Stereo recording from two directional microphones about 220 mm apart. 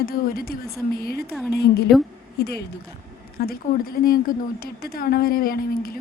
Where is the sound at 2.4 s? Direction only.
45° left (ahead or behind).